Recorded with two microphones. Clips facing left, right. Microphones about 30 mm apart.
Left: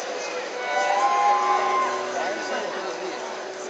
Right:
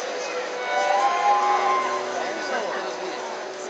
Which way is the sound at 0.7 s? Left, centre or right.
Centre.